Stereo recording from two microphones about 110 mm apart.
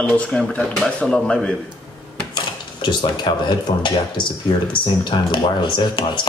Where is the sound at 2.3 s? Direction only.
45° left (ahead or behind).